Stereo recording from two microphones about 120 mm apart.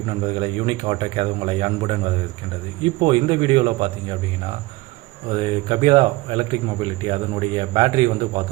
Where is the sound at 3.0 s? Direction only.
40° right (ahead or behind).